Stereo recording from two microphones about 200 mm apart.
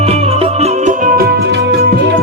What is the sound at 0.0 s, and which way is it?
Music, 30° right (ahead or behind).